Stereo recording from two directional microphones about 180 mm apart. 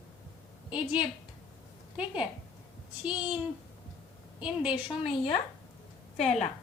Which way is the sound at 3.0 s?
5° right (ahead or behind).